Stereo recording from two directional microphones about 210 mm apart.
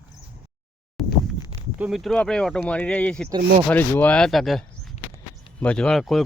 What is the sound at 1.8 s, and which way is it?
Speech, centre (ahead or behind).